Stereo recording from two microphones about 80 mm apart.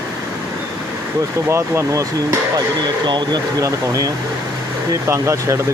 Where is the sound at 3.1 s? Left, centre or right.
Right.